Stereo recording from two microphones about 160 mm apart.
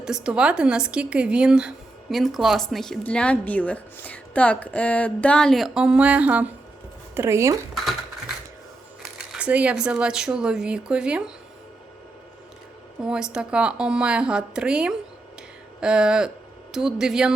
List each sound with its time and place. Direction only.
0.0 s speech: 5° right (ahead or behind)
9.3 s speech: 10° right (ahead or behind)
13.1 s speech: 5° right (ahead or behind)